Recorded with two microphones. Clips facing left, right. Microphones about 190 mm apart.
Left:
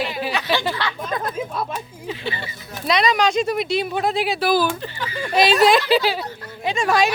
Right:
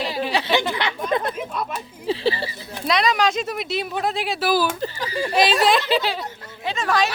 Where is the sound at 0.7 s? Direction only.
20° right (ahead or behind).